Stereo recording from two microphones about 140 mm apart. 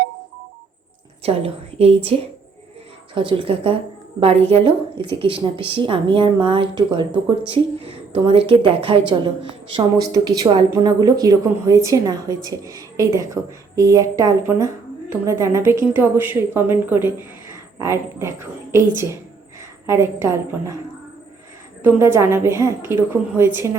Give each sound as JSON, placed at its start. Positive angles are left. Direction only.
{"t": 1.2, "sound": "a woman's voice", "side_deg": -45}
{"t": 3.2, "sound": "a woman's voice", "side_deg": -35}
{"t": 9.7, "sound": "a woman's voice", "side_deg": -25}
{"t": 21.9, "sound": "a woman's voice", "side_deg": -20}